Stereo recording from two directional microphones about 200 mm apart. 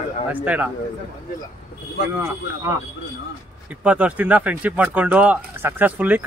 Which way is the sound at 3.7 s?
5° right (ahead or behind).